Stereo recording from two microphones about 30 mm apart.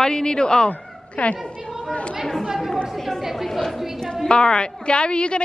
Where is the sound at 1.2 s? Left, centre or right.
Left.